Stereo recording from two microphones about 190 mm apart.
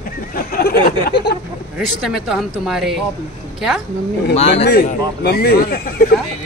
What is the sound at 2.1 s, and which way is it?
Speech, centre (ahead or behind).